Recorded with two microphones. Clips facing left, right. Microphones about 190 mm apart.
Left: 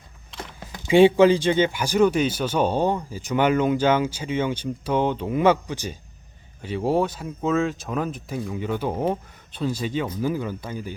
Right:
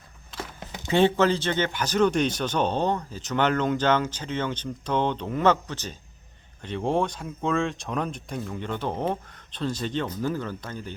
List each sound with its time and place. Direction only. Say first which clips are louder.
0.9 s speech: left 6 dB; 10° left (ahead or behind)